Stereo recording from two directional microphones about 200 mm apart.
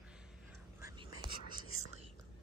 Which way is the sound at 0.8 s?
20° right (ahead or behind).